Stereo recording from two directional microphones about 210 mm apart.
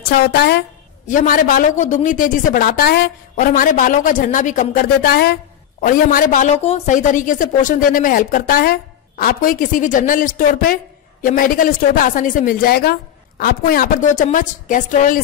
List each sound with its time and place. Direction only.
0.0 s a woman's voice: 50° left (ahead or behind)
1.0 s a woman's voice: 40° left (ahead or behind)